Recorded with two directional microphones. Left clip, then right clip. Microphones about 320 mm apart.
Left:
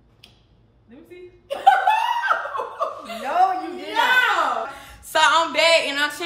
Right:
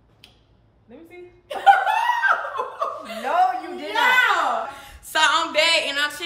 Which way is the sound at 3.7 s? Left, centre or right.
Centre.